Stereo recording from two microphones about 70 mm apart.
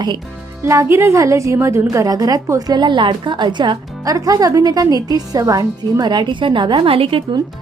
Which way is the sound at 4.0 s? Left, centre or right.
Right.